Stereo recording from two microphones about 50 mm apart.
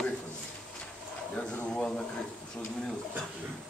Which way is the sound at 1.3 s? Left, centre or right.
Left.